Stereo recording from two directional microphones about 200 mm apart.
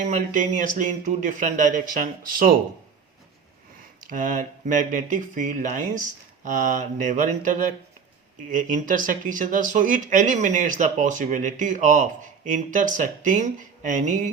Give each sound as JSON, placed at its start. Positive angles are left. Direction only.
{"t": 0.0, "sound": "speech", "side_deg": -40}
{"t": 4.0, "sound": "speech", "side_deg": -40}